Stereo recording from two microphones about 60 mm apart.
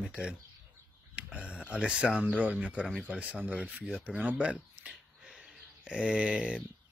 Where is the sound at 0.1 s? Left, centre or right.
Centre.